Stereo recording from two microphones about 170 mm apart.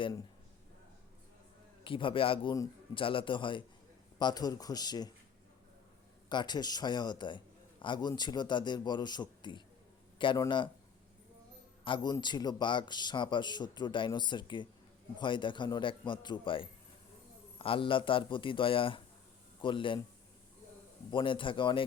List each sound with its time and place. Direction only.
1.8 s a man's voice: 30° left (ahead or behind)
6.2 s a man's voice: 25° left (ahead or behind)
11.9 s a man's voice: 25° left (ahead or behind)
21.1 s a man's voice: 30° left (ahead or behind)